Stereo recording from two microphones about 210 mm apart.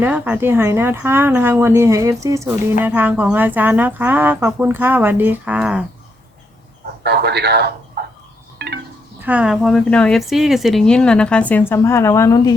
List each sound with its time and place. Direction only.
0.0 s speech: 10° right (ahead or behind)
7.0 s a man's voice: 50° right (ahead or behind)
8.5 s wind chime: 50° right (ahead or behind)
9.2 s speech: 5° right (ahead or behind); by 12.5 s 15° left (ahead or behind)